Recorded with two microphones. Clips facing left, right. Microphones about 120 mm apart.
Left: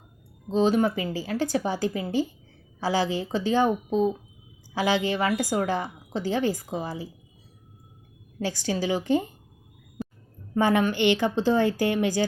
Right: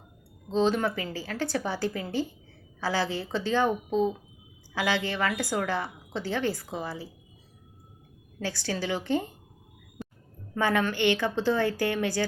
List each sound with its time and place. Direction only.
0.4 s a woman's voice: 10° left (ahead or behind)
8.4 s a woman's voice: 15° left (ahead or behind)
10.5 s a woman's voice: 15° left (ahead or behind)